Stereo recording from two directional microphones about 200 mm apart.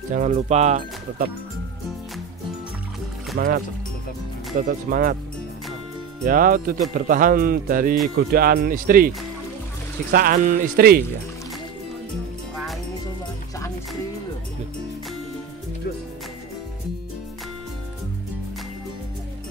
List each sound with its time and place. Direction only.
0.1 s speech: 35° right (ahead or behind)
3.3 s speech: 45° right (ahead or behind)
6.2 s speech: 45° right (ahead or behind)
10.1 s speech: 45° right (ahead or behind)